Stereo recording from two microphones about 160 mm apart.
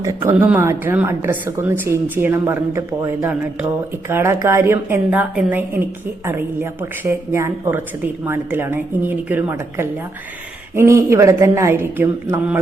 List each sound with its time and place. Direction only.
0.0 s a woman's voice: 15° right (ahead or behind)